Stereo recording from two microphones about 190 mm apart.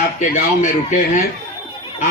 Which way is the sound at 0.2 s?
40° left (ahead or behind).